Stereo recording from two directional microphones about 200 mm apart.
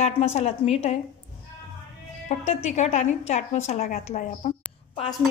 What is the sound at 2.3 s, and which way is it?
A woman's voice, 35° left (ahead or behind).